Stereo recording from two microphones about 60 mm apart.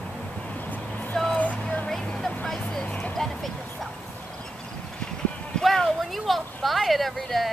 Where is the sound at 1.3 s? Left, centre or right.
Left.